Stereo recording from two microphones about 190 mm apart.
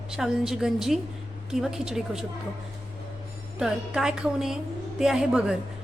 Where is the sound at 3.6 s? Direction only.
5° right (ahead or behind).